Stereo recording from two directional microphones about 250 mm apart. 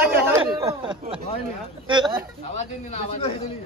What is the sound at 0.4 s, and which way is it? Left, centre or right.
Speech, centre.